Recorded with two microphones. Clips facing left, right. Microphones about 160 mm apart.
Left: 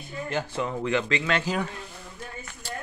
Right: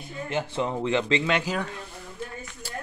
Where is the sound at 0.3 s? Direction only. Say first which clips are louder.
Right 2 dB; 20° right (ahead or behind).